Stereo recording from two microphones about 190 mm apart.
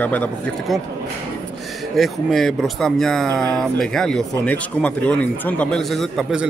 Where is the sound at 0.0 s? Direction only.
10° left (ahead or behind).